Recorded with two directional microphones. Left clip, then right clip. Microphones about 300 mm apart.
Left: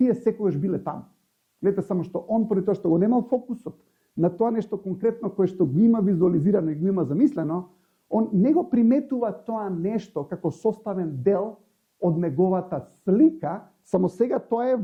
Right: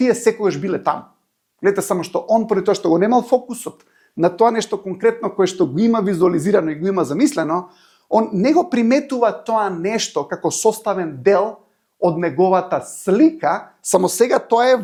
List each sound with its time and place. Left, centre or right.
0.0 s speech: centre